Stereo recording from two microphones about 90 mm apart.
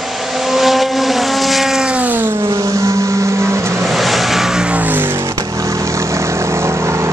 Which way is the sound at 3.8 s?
Centre (ahead or behind).